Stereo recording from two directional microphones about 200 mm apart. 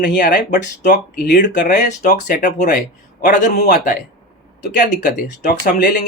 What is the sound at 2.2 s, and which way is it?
Speech, 55° left (ahead or behind).